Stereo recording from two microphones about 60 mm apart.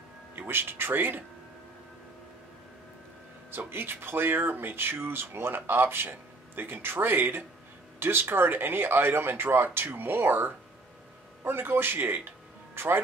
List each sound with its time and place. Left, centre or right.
0.4 s speech: right
3.5 s speech: right